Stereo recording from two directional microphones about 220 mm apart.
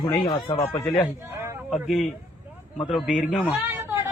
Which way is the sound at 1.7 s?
Centre (ahead or behind).